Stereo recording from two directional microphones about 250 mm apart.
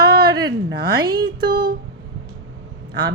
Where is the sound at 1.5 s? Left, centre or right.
Right.